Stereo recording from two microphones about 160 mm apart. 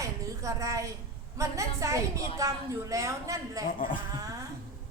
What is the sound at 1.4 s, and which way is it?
A woman's voice, 20° right (ahead or behind).